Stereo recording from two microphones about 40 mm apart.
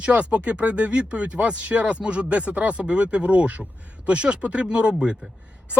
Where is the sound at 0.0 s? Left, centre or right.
Right.